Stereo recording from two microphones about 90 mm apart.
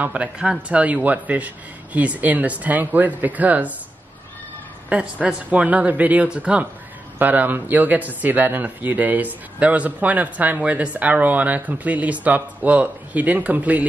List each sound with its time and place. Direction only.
0.0 s speech: 15° right (ahead or behind)
4.8 s speech: 15° right (ahead or behind)